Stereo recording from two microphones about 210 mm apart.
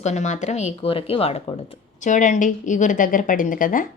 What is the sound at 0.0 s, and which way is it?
A woman's voice, 35° left (ahead or behind).